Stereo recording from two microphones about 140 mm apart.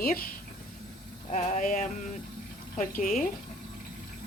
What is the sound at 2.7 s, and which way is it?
Speech, 75° left (ahead or behind).